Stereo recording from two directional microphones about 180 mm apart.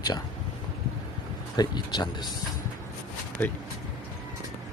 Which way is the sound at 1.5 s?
25° left (ahead or behind).